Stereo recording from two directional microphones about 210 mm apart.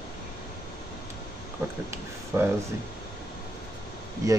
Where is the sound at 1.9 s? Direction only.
10° right (ahead or behind).